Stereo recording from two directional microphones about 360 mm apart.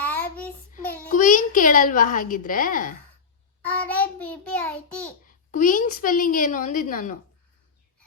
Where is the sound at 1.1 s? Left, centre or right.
Left.